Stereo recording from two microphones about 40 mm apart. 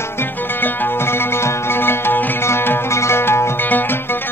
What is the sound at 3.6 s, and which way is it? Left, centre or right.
Music, left.